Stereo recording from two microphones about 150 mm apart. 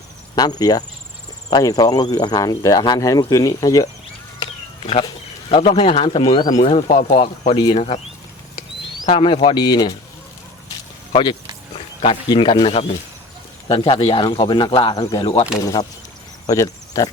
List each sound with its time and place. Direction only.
0.3 s speech: 25° left (ahead or behind)
5.0 s speech: 35° left (ahead or behind)
6.6 s speech: 50° left (ahead or behind)
7.5 s speech: 40° left (ahead or behind)
9.0 s speech: 40° left (ahead or behind)
9.6 s speech: 25° left (ahead or behind)
11.1 s speech: 30° left (ahead or behind)